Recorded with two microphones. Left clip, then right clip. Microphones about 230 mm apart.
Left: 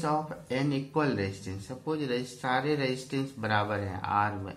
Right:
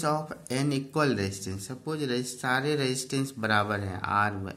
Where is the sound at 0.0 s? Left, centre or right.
Right.